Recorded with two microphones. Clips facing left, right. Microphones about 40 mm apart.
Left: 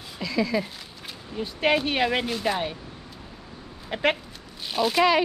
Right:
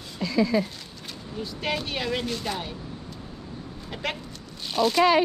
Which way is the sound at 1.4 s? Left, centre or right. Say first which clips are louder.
Left 7 dB; left.